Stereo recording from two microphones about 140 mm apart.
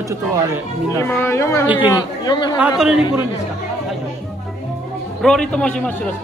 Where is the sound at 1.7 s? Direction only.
15° right (ahead or behind).